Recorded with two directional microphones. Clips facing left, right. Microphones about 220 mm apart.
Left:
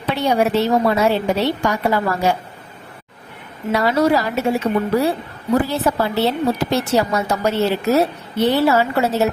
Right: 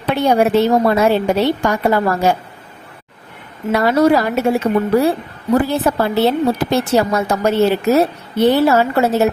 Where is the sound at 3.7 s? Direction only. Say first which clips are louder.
Right 3 dB; 50° right (ahead or behind).